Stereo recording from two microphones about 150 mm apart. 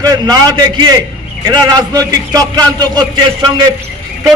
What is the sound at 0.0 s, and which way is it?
A man's voice, 25° right (ahead or behind).